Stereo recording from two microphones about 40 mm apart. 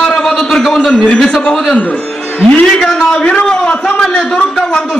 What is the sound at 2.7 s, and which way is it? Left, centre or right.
Speech, centre.